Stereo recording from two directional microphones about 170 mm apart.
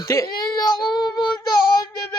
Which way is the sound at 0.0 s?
20° left (ahead or behind).